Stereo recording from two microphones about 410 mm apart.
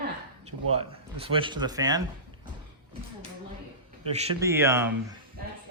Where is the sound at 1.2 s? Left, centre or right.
Centre.